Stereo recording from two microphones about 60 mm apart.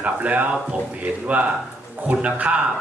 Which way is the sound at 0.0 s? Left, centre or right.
Right.